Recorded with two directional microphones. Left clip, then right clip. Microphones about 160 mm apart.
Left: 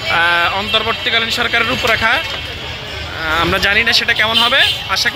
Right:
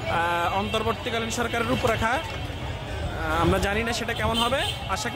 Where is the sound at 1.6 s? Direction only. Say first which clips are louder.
Left 10 dB; centre (ahead or behind).